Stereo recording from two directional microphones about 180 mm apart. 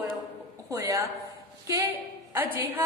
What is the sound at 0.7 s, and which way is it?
Speech, 15° right (ahead or behind).